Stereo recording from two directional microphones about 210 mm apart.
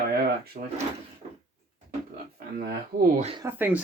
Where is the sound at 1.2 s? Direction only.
35° right (ahead or behind).